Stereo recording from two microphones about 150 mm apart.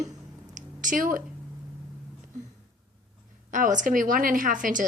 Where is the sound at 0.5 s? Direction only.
60° right (ahead or behind).